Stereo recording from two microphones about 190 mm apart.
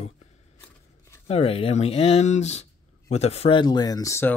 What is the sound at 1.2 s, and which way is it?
Speech, 30° left (ahead or behind).